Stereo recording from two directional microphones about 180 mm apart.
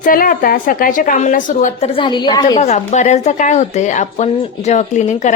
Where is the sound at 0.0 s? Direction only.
50° left (ahead or behind).